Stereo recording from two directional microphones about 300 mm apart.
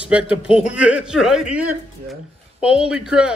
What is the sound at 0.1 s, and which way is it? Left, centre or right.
Speech, centre.